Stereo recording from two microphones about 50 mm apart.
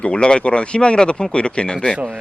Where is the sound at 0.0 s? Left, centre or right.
Centre.